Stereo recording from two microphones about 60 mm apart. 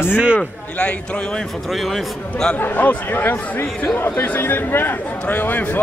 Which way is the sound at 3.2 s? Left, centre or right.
Left.